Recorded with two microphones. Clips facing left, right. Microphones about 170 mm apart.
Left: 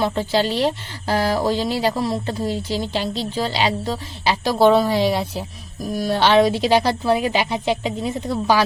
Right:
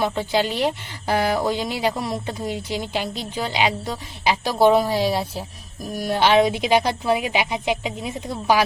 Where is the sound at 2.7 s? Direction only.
30° left (ahead or behind).